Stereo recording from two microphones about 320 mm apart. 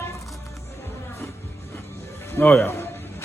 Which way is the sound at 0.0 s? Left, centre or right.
Centre.